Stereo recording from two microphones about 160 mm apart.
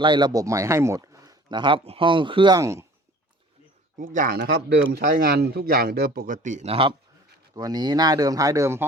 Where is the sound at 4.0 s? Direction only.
60° right (ahead or behind); by 7.0 s 35° right (ahead or behind).